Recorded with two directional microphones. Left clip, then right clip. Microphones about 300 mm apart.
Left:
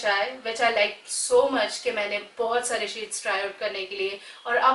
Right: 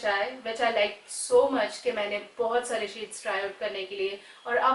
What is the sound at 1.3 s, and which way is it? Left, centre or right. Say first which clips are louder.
Speech: left 2 dB; centre.